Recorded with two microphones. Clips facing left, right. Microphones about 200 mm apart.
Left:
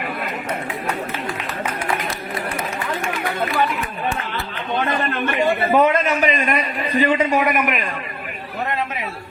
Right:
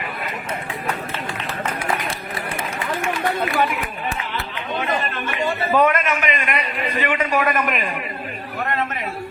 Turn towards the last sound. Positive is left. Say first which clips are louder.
# left 1 dB
turn(degrees=10)  # may be behind; listen again after turning